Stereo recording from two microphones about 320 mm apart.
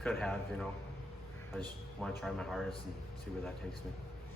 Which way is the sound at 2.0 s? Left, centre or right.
Centre.